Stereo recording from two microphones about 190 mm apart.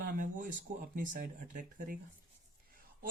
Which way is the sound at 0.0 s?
45° right (ahead or behind).